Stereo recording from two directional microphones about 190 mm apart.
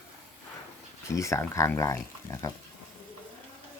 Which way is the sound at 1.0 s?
15° left (ahead or behind).